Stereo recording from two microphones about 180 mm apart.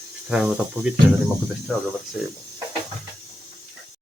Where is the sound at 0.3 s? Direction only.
5° right (ahead or behind).